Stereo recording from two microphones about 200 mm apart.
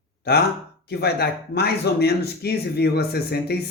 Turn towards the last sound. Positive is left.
turn(degrees=50)  # may be behind; listen again after turning